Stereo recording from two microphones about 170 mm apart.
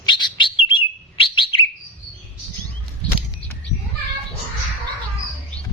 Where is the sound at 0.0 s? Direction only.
25° left (ahead or behind).